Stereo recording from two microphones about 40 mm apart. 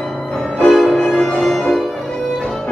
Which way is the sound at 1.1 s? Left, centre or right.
Left.